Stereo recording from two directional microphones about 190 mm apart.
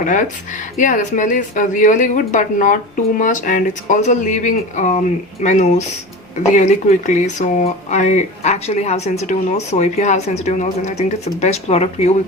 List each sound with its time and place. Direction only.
0.0 s speech: 40° left (ahead or behind)